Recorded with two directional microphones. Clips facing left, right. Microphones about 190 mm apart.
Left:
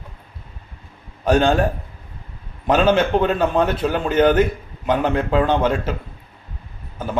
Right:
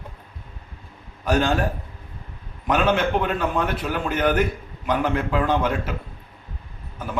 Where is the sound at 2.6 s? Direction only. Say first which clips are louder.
Left 4 dB; 30° left (ahead or behind).